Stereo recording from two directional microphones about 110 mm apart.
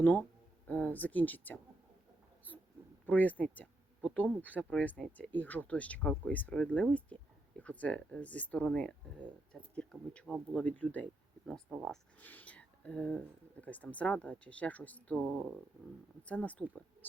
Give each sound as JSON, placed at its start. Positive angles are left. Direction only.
{"t": 0.0, "sound": "speech", "side_deg": 15}
{"t": 3.1, "sound": "speech", "side_deg": 15}
{"t": 11.7, "sound": "speech", "side_deg": -5}
{"t": 12.2, "sound": "speech", "side_deg": 15}